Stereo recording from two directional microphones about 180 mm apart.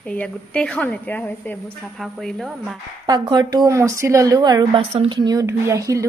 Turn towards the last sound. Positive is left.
turn(degrees=-15)  # may be behind; listen again after turning